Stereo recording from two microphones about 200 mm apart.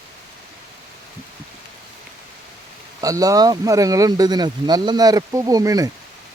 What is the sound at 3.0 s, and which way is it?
Speech, 15° right (ahead or behind).